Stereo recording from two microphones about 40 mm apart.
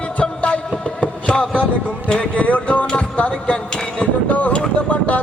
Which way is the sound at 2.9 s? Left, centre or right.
Left.